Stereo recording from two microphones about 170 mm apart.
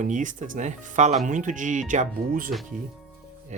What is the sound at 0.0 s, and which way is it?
Speech, 50° right (ahead or behind).